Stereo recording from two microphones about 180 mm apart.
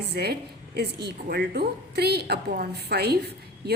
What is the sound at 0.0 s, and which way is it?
A woman's voice, 65° right (ahead or behind).